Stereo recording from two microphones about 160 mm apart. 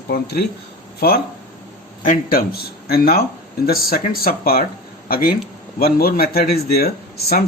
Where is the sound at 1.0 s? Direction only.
70° left (ahead or behind).